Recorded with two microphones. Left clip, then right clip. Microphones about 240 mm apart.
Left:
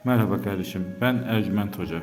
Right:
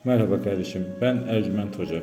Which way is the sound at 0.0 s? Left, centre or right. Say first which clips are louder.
Right 2 dB; centre.